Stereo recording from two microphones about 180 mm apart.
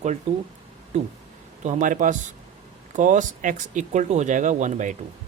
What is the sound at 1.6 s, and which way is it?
Speech, 45° right (ahead or behind).